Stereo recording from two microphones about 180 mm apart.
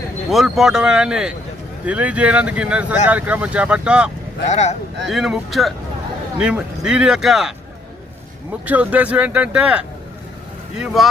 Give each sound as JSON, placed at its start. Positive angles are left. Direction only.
{"t": 0.3, "sound": "speech", "side_deg": 0}
{"t": 4.4, "sound": "speech", "side_deg": 40}
{"t": 5.0, "sound": "speech", "side_deg": 0}
{"t": 8.6, "sound": "speech", "side_deg": -10}